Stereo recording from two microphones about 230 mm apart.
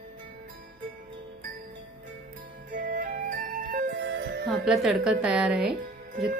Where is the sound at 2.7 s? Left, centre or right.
Right.